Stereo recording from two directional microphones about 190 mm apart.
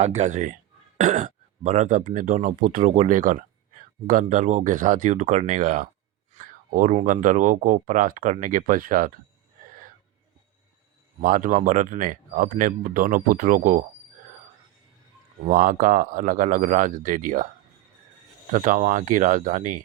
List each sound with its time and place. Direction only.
0.0 s speech: 35° right (ahead or behind)
11.2 s speech: 45° right (ahead or behind)
15.4 s speech: 45° right (ahead or behind)
18.5 s speech: 45° right (ahead or behind)